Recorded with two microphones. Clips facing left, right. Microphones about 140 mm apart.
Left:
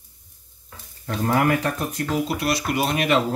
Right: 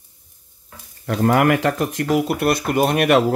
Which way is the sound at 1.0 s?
75° right (ahead or behind).